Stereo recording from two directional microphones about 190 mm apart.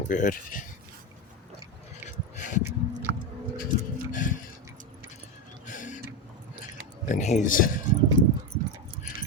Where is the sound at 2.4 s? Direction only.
40° left (ahead or behind).